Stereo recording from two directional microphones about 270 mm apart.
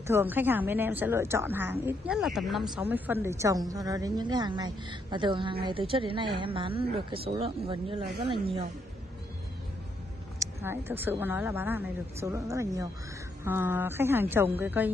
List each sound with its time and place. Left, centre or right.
0.0 s a woman's voice: centre
10.4 s a woman's voice: centre